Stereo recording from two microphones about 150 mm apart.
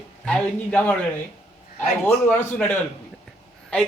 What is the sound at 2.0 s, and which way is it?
Speech, 10° left (ahead or behind).